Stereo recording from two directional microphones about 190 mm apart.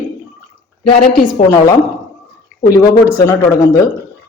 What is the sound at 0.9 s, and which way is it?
Speech, 25° left (ahead or behind).